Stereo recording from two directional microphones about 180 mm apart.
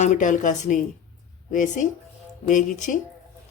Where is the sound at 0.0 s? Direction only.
45° left (ahead or behind).